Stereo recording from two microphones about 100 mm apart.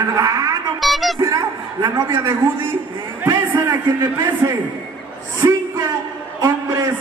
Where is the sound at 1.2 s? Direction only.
30° right (ahead or behind).